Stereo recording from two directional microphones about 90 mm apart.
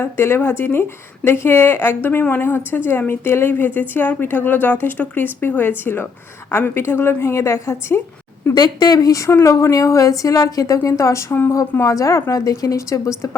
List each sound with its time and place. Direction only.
0.0 s speech: 25° left (ahead or behind)
8.5 s speech: 50° left (ahead or behind); by 11.5 s 25° left (ahead or behind)
11.8 s speech: 35° left (ahead or behind)